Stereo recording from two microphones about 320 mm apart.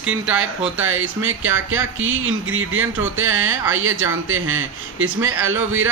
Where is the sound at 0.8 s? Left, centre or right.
Right.